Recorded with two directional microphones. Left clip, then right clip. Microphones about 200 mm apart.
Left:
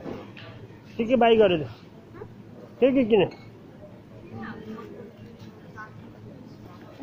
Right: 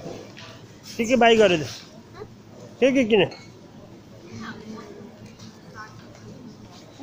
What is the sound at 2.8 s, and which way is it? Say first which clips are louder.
Speech: right 1 dB; 15° right (ahead or behind).